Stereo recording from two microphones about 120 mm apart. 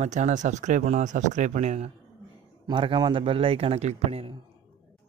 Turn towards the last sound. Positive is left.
turn(degrees=-60)  # may be behind; listen again after turning